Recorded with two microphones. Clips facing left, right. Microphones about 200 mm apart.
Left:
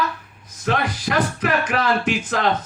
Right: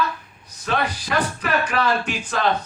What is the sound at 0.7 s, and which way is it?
Music, 90° left.